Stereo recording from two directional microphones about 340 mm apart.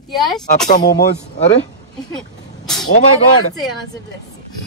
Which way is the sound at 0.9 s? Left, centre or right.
Left.